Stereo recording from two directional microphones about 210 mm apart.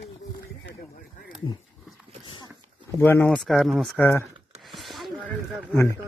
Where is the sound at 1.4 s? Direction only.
25° left (ahead or behind).